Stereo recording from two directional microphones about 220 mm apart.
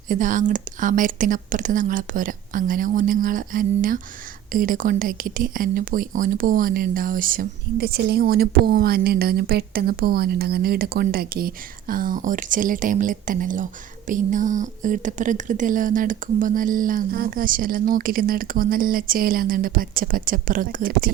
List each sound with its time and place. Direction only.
0.1 s speech: 35° right (ahead or behind)